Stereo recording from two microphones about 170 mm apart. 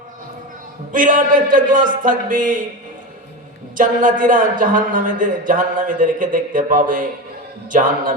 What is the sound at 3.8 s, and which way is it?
A man's voice, 50° right (ahead or behind).